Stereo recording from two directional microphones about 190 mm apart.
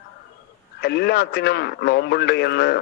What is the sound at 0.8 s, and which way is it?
Speech, 55° left (ahead or behind).